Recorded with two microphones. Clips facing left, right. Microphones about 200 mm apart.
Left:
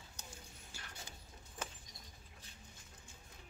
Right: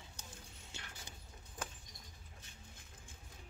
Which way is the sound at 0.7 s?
20° right (ahead or behind).